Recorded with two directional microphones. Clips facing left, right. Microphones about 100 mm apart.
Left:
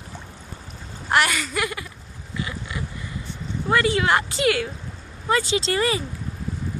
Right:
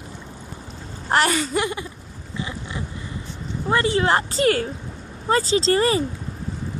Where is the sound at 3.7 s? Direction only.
30° right (ahead or behind).